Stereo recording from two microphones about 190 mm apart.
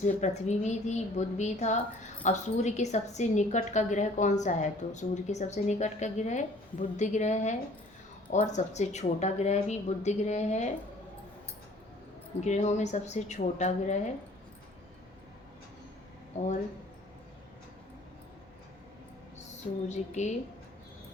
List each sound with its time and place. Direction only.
0.0 s a woman's voice: 35° left (ahead or behind)
12.4 s a woman's voice: 40° left (ahead or behind)
16.4 s a woman's voice: 40° left (ahead or behind)
19.9 s a woman's voice: 35° left (ahead or behind)